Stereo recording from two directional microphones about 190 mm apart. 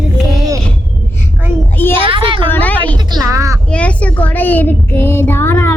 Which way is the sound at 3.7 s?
5° left (ahead or behind).